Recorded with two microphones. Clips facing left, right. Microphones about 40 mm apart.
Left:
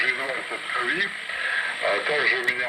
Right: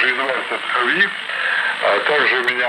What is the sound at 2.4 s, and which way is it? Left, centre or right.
Speech, right.